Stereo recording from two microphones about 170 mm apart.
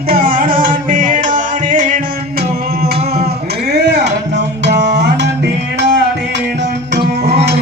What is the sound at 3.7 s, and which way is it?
Music, 90° right.